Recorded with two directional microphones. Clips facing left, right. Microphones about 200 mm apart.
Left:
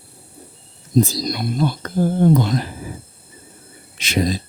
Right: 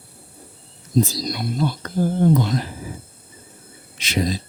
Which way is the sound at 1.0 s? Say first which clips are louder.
Left 2 dB; 50° left (ahead or behind).